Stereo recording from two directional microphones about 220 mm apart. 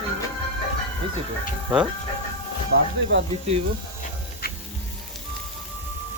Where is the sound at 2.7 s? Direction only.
65° right (ahead or behind).